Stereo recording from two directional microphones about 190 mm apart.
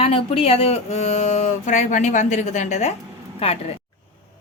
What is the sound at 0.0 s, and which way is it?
Speech, 30° left (ahead or behind).